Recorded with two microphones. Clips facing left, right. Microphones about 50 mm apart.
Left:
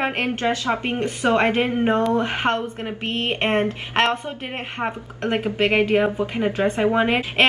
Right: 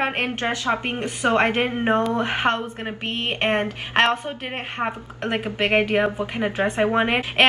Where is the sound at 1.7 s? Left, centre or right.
Centre.